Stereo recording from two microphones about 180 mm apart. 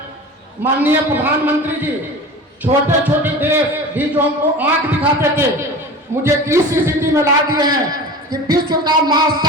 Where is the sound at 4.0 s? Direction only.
10° right (ahead or behind).